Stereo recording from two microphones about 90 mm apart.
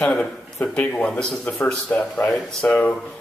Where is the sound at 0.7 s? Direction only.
15° left (ahead or behind).